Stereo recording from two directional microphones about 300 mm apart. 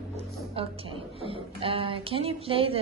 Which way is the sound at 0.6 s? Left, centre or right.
Centre.